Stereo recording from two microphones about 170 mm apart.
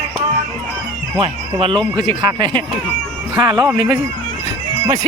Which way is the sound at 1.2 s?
35° right (ahead or behind).